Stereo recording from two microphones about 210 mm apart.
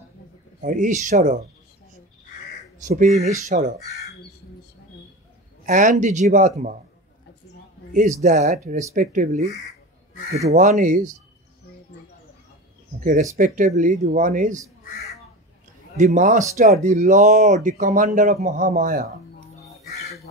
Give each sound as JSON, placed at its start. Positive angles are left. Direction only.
{"t": 0.6, "sound": "speech", "side_deg": -35}
{"t": 2.8, "sound": "speech", "side_deg": -35}
{"t": 5.7, "sound": "speech", "side_deg": -35}
{"t": 7.9, "sound": "speech", "side_deg": -35}
{"t": 10.5, "sound": "speech", "side_deg": -35}
{"t": 13.0, "sound": "speech", "side_deg": -35}
{"t": 16.0, "sound": "speech", "side_deg": -35}